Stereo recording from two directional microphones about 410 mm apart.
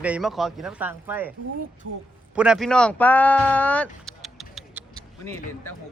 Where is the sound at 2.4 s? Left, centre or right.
Centre.